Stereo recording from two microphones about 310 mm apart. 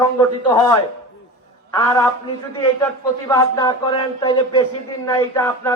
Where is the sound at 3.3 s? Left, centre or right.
Centre.